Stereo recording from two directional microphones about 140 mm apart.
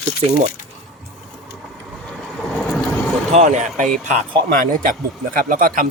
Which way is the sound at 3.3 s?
55° right (ahead or behind).